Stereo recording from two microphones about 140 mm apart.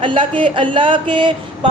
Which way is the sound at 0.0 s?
35° right (ahead or behind).